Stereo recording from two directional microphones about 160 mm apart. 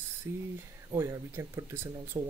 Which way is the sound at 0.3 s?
15° right (ahead or behind).